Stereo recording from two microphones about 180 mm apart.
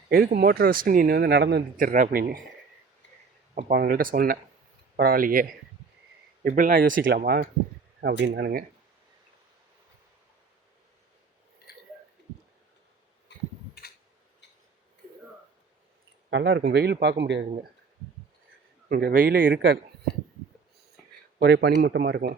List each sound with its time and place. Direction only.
0.1 s speech: 55° right (ahead or behind)
1.8 s speech: 45° right (ahead or behind)
3.7 s speech: 60° right (ahead or behind)
8.2 s a man's voice: 70° right (ahead or behind)
13.3 s a sound: 75° left (ahead or behind)
16.3 s a man's voice: 70° right (ahead or behind)
18.9 s speech: 55° right (ahead or behind); by 19.8 s 80° right
21.4 s speech: 60° right (ahead or behind)